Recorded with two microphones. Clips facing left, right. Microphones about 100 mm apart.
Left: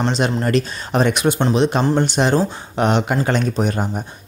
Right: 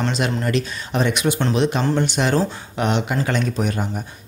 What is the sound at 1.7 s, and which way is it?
Speech, 35° left (ahead or behind).